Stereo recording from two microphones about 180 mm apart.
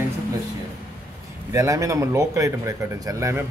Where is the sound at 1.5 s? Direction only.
20° right (ahead or behind).